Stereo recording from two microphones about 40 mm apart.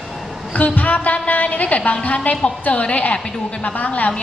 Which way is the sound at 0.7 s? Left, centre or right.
Left.